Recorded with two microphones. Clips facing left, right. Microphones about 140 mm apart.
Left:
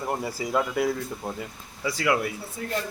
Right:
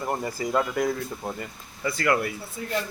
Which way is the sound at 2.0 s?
5° left (ahead or behind).